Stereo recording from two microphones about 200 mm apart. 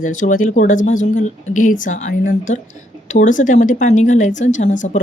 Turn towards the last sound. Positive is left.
turn(degrees=35)  # may be behind; listen again after turning